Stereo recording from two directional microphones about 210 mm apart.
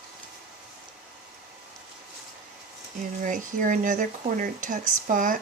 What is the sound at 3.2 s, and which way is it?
Speech, 40° right (ahead or behind).